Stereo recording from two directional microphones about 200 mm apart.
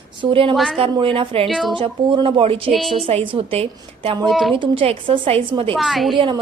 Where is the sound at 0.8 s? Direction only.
25° right (ahead or behind).